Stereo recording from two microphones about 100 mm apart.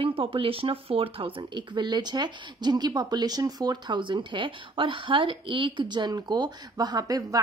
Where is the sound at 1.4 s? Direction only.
50° right (ahead or behind).